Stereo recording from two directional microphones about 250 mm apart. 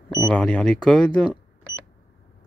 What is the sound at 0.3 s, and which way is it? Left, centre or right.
Speech, centre.